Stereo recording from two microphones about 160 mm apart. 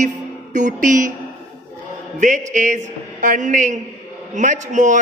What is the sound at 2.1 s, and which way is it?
A man's voice, 50° right (ahead or behind).